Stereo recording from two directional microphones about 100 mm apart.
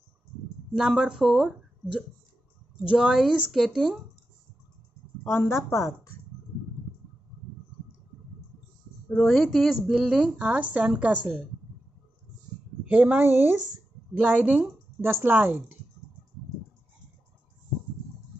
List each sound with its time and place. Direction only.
0.7 s a woman's voice: 5° right (ahead or behind)
3.0 s a woman's voice: 5° right (ahead or behind)
5.2 s speech: 25° left (ahead or behind)
9.1 s a woman's voice: 5° left (ahead or behind); by 11.3 s 15° right (ahead or behind)
12.8 s speech: 15° right (ahead or behind)